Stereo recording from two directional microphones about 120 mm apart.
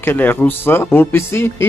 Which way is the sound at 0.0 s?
15° left (ahead or behind).